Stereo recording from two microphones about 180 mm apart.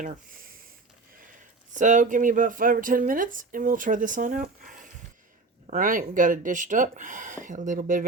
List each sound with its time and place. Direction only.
1.7 s speech: 45° right (ahead or behind)